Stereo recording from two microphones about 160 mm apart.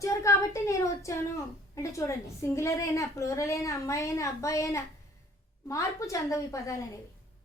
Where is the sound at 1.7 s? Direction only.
20° left (ahead or behind).